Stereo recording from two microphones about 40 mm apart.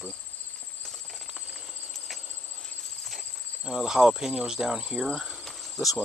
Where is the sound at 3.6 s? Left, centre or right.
Centre.